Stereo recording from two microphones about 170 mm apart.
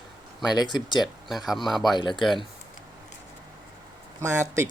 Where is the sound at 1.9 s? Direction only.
25° left (ahead or behind).